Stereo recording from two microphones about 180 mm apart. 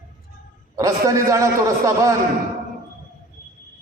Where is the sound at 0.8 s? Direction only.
20° right (ahead or behind).